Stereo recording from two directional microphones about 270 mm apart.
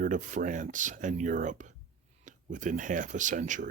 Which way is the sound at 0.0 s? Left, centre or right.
Right.